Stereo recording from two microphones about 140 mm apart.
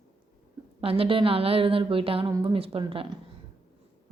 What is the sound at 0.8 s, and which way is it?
A woman's voice, 45° right (ahead or behind).